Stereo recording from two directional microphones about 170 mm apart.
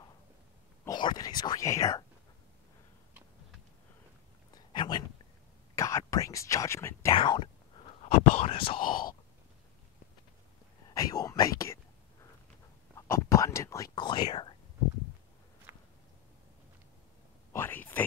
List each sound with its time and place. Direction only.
0.8 s whispering: 25° left (ahead or behind)
4.7 s a sound: 30° left (ahead or behind)
5.8 s speech: 20° left (ahead or behind)
7.2 s speech: 30° left (ahead or behind)
8.0 s whispering: 35° left (ahead or behind)
8.7 s whispering: 55° left (ahead or behind)
10.9 s whispering: 20° left (ahead or behind)
12.9 s whispering: 20° left (ahead or behind)
15.7 s walk: 15° right (ahead or behind)
17.5 s a sound: 10° left (ahead or behind)